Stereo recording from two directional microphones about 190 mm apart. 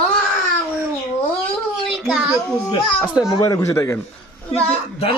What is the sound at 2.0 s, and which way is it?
Speech, centre (ahead or behind).